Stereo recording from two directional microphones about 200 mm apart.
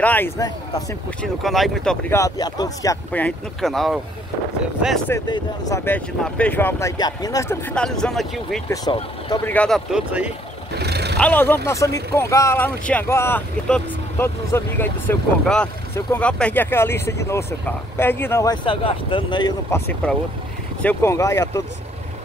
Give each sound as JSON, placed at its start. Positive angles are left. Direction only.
{"t": 0.0, "sound": "speech", "side_deg": 10}
{"t": 1.2, "sound": "a man's voice", "side_deg": 0}
{"t": 2.0, "sound": "a man's voice", "side_deg": 15}
{"t": 5.1, "sound": "speech", "side_deg": 15}
{"t": 7.7, "sound": "a man's voice", "side_deg": 5}
{"t": 9.9, "sound": "speech", "side_deg": -5}
{"t": 10.8, "sound": "vehicle", "side_deg": -55}
{"t": 11.1, "sound": "speech", "side_deg": 10}
{"t": 19.7, "sound": "speech", "side_deg": 10}